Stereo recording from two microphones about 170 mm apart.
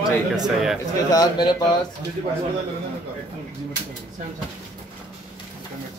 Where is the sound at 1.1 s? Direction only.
25° left (ahead or behind).